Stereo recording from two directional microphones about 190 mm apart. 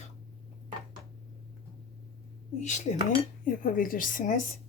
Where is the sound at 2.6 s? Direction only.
40° left (ahead or behind).